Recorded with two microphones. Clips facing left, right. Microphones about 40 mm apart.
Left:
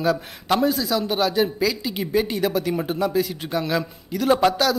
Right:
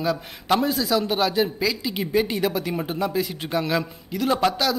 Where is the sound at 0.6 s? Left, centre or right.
Right.